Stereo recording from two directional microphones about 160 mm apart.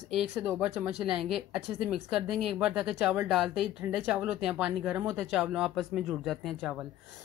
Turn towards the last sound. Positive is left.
turn(degrees=0)  # may be behind; listen again after turning